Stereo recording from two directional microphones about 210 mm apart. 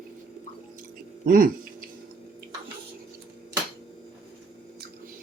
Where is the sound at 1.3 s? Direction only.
40° right (ahead or behind).